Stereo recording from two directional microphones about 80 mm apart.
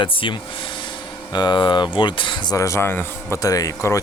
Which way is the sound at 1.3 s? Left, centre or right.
Left.